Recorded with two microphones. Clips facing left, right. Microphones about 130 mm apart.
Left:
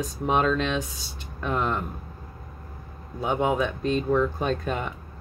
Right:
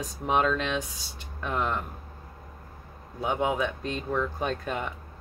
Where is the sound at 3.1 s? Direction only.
Centre (ahead or behind).